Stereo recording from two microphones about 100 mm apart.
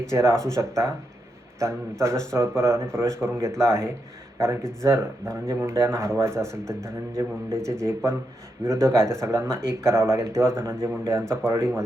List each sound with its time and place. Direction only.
0.1 s speech: 30° right (ahead or behind)
8.6 s speech: 30° right (ahead or behind)